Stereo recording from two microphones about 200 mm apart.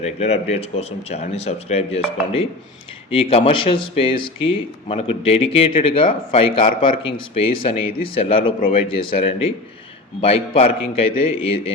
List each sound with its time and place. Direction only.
0.0 s speech: 30° left (ahead or behind)